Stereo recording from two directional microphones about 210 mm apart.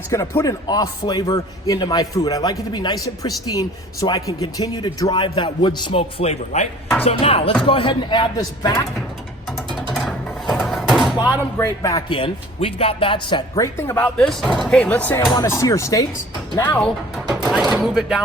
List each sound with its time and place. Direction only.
0.1 s speech: 15° left (ahead or behind)
9.9 s a sound: centre (ahead or behind)
11.2 s speech: 15° left (ahead or behind)
17.4 s chopping: 5° right (ahead or behind)